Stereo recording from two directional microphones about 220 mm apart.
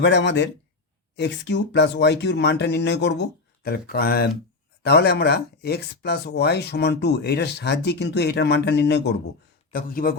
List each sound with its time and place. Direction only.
0.0 s speech: 55° left (ahead or behind)